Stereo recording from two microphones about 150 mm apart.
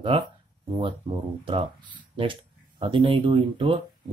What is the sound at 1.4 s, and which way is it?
Speech, 35° right (ahead or behind).